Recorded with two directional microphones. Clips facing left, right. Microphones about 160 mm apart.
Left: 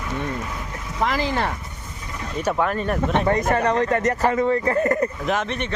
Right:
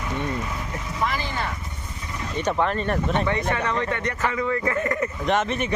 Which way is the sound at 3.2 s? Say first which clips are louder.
Left 5 dB; 40° left (ahead or behind).